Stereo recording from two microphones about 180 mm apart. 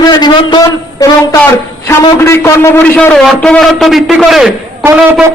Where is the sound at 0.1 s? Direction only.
25° left (ahead or behind).